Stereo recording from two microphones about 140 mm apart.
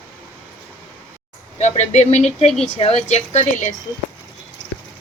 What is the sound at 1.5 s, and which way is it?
A woman's voice, 55° left (ahead or behind).